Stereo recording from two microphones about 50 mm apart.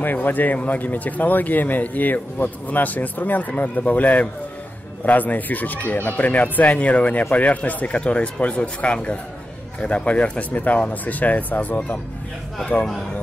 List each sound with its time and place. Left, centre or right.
0.0 s speech: left